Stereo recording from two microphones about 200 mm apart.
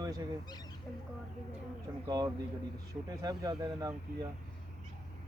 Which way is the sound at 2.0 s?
20° right (ahead or behind).